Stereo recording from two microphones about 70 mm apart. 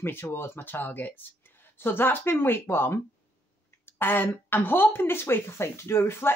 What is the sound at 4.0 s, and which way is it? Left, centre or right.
Speech, left.